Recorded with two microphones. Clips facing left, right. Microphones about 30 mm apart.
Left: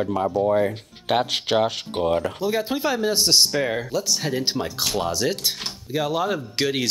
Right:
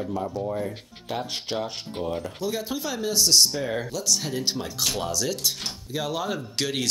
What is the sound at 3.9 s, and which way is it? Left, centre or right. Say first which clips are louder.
Speech: left 3 dB; left.